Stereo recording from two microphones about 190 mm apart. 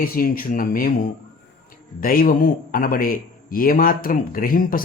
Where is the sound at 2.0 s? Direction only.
50° left (ahead or behind).